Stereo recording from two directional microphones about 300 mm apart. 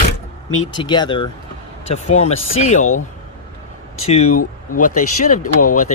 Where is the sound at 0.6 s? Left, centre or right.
Centre.